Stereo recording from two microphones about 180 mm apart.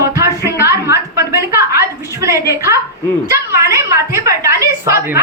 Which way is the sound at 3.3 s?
15° right (ahead or behind).